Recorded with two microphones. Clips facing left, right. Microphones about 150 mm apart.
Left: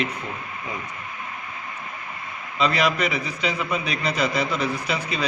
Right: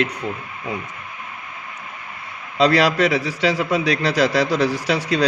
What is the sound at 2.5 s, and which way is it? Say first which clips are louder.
A man's voice: right 6 dB; 85° right.